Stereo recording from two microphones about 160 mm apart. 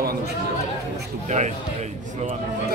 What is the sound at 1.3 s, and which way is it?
A man's voice, 45° right (ahead or behind).